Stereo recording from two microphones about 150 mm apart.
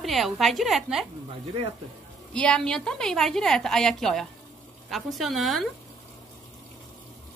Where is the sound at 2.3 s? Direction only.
5° left (ahead or behind).